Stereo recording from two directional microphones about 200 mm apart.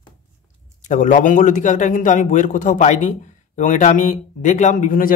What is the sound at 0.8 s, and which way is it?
A man's voice, 40° left (ahead or behind).